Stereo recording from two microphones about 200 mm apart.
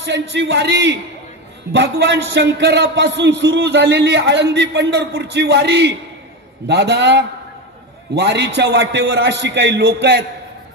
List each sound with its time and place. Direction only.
0.0 s a man's voice: 60° right (ahead or behind)